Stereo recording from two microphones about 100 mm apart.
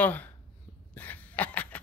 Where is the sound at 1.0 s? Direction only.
15° left (ahead or behind).